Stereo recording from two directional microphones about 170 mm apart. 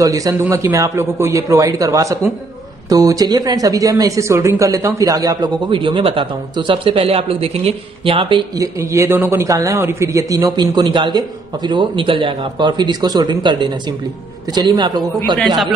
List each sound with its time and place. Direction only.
0.0 s speech: 20° right (ahead or behind)